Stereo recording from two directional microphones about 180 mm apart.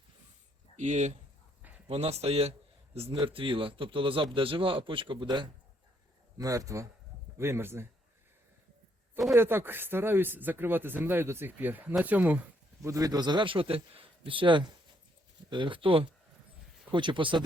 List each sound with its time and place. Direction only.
0.8 s a man's voice: 40° right (ahead or behind); by 7.9 s 15° right (ahead or behind)
9.3 s a man's voice: 10° right (ahead or behind)